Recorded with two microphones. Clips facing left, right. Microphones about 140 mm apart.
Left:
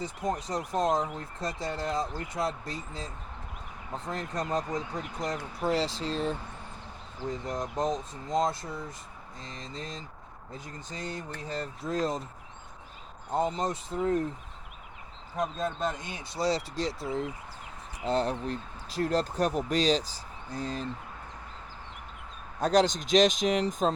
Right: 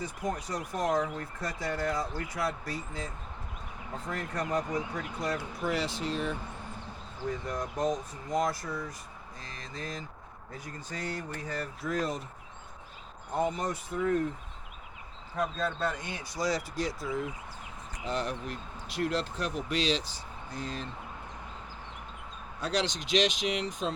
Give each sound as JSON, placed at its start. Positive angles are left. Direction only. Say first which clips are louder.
{"t": 0.0, "sound": "speech", "louder": "left 2 dB", "side_deg": 25}
{"t": 4.1, "sound": "speech", "louder": "left 1 dB", "side_deg": 25}
{"t": 5.6, "sound": "speech", "louder": "left 4 dB", "side_deg": 35}
{"t": 7.3, "sound": "speech", "louder": "left 1 dB", "side_deg": 20}
{"t": 13.3, "sound": "speech", "louder": "left 2 dB", "side_deg": 25}
{"t": 15.4, "sound": "speech", "louder": "left 1 dB", "side_deg": 20}
{"t": 22.6, "sound": "speech", "louder": "left 7 dB", "side_deg": 45}